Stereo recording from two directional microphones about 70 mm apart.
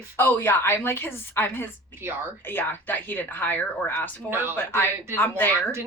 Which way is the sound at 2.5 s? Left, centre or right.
Left.